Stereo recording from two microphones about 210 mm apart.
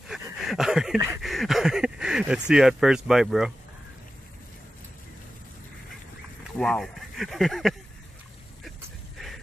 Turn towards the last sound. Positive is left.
turn(degrees=0)  # may be behind; listen again after turning